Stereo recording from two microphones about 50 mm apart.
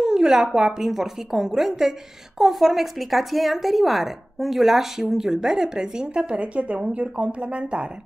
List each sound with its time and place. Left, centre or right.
0.0 s a woman's voice: centre